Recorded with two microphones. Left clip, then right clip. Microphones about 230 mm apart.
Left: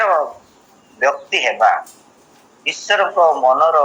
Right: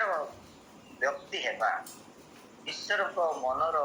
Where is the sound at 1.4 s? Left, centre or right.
Left.